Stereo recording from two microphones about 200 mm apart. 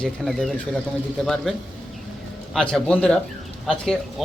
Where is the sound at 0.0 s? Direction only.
Centre (ahead or behind).